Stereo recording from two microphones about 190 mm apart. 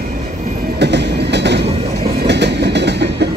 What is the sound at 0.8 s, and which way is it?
Train, 65° right (ahead or behind).